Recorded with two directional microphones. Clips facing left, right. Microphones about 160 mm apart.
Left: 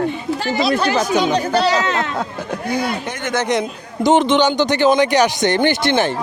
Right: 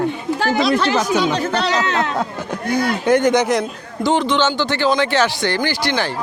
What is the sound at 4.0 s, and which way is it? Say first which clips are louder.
Speech: left 3 dB; 20° left (ahead or behind).